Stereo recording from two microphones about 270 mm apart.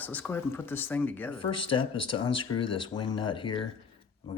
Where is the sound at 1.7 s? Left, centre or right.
Centre.